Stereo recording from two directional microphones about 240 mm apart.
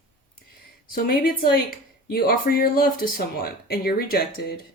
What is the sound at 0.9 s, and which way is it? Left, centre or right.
Speech, left.